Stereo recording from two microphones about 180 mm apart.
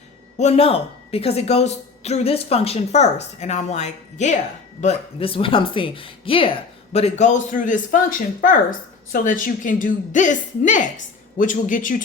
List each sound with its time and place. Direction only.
0.3 s a woman's voice: 35° left (ahead or behind)